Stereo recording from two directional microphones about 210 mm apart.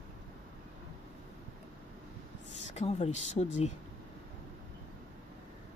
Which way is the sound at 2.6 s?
30° left (ahead or behind).